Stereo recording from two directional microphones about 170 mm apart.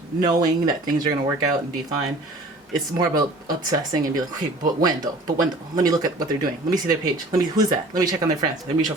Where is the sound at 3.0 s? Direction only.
20° right (ahead or behind).